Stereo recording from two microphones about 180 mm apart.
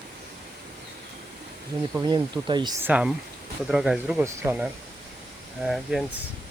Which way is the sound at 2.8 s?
5° right (ahead or behind).